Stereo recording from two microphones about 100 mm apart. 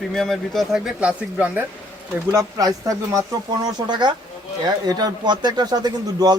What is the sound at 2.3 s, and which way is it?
Speech, 35° right (ahead or behind).